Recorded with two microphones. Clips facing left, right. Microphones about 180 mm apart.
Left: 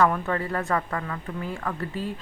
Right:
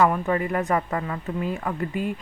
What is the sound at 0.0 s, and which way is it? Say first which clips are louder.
Speech: right 2 dB; 10° right (ahead or behind).